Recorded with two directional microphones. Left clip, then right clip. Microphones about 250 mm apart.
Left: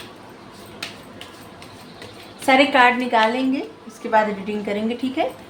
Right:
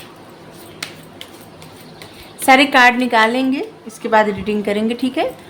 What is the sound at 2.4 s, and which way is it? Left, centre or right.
A woman's voice, right.